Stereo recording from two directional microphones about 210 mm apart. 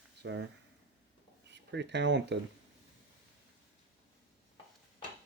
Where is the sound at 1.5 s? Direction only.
55° right (ahead or behind).